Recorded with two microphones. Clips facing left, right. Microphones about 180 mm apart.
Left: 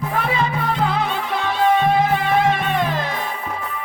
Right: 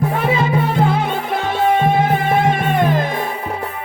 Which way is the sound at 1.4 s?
50° right (ahead or behind).